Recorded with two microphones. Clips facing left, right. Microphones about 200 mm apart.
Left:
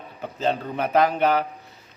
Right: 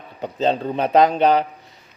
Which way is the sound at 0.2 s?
25° right (ahead or behind).